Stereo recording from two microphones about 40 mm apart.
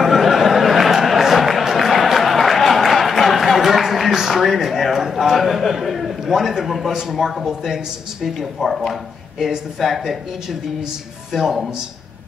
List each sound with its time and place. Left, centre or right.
0.0 s a sound: centre
6.9 s speech: centre
7.2 s speech: centre
11.3 s speech: centre